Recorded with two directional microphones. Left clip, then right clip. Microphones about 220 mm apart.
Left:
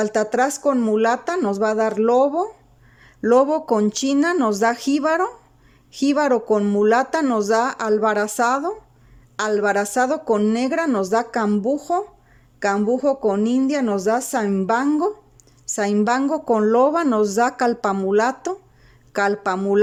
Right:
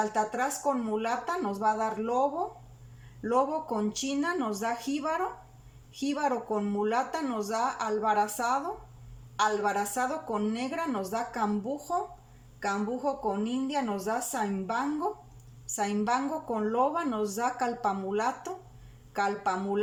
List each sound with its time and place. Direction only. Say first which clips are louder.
0.0 s a woman's voice: left 9 dB; 50° left (ahead or behind)